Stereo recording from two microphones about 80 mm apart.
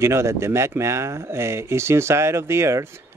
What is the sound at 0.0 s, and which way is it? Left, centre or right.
Speech, right.